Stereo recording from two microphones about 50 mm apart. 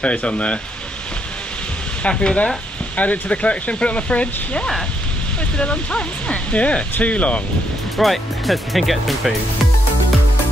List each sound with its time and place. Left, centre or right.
0.0 s speech: left
2.0 s speech: left
8.0 s speech: centre